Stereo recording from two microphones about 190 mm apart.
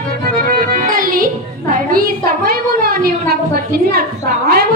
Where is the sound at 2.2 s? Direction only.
50° right (ahead or behind).